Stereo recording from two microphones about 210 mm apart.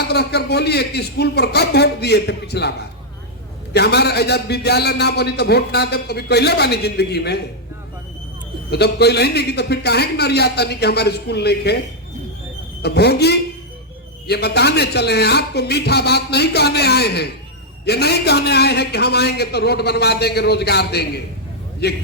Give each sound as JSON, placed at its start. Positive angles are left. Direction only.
{"t": 0.0, "sound": "a man's voice", "side_deg": 50}
{"t": 8.7, "sound": "a man's voice", "side_deg": 50}
{"t": 12.8, "sound": "a man's voice", "side_deg": 50}